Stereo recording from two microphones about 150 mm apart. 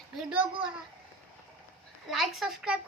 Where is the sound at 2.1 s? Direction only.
Centre (ahead or behind).